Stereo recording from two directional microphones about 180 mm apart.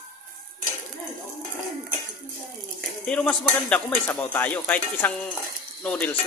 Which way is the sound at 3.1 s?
5° left (ahead or behind).